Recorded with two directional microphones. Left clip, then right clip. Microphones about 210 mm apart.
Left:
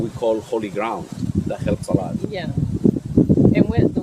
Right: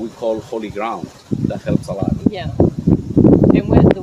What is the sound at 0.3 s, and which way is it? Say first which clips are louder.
Speech: even; 20° left (ahead or behind).